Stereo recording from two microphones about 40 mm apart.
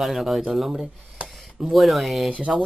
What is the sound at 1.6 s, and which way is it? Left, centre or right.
Speech, centre.